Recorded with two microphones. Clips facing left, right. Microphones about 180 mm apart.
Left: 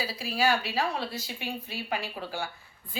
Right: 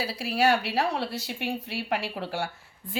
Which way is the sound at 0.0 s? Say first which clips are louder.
Right 3 dB; 70° right (ahead or behind).